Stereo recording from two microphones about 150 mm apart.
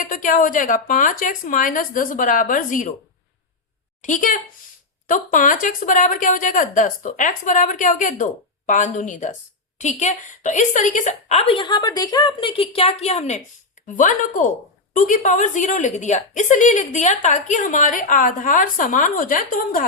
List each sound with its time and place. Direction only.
0.0 s a woman's voice: 60° left (ahead or behind)
4.0 s a woman's voice: 60° left (ahead or behind)
13.8 s a woman's voice: 55° left (ahead or behind)